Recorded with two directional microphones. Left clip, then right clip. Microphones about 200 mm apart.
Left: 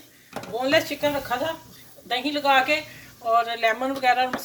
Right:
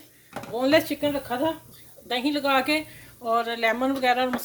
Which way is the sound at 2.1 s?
55° right (ahead or behind).